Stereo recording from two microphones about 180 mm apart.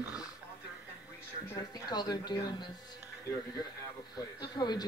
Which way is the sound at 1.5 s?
20° left (ahead or behind).